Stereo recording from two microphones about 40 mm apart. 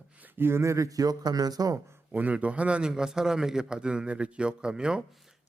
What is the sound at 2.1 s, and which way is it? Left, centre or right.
Speech, right.